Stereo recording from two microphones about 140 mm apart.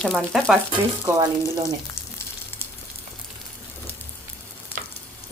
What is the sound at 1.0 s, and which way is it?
Speech, 25° right (ahead or behind).